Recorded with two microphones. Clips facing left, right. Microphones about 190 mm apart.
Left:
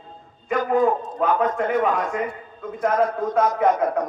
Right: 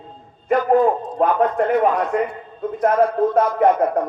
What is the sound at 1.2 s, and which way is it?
A man's voice, 50° right (ahead or behind).